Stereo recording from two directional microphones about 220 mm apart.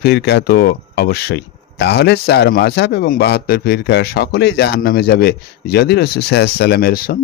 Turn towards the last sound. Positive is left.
turn(degrees=40)  # may be behind; listen again after turning